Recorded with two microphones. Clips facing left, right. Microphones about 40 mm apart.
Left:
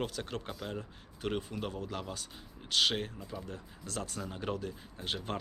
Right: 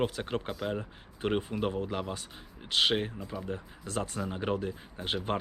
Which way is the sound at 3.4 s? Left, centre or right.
Right.